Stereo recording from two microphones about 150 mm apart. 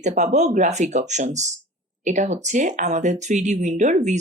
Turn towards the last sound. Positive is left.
turn(degrees=-55)  # may be behind; listen again after turning